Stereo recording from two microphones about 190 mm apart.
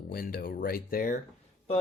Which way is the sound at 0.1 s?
50° left (ahead or behind).